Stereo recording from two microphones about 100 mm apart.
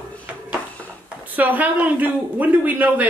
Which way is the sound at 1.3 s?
15° right (ahead or behind).